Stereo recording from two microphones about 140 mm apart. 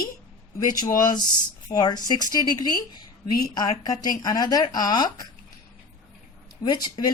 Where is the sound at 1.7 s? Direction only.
30° left (ahead or behind).